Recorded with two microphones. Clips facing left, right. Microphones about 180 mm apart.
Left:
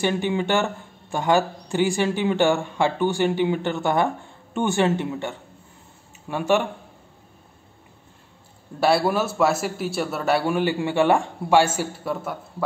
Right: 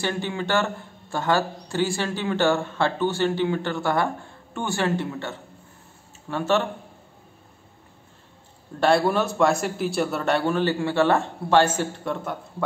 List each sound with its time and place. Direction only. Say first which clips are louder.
0.0 s speech: left 5 dB; 15° left (ahead or behind)
8.7 s speech: even; 5° left (ahead or behind)